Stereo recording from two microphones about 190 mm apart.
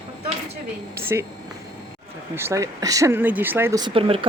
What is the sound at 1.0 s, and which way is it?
Speech, 10° right (ahead or behind).